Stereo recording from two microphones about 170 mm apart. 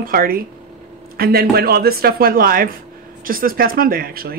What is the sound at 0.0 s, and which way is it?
A woman's voice, 60° right (ahead or behind).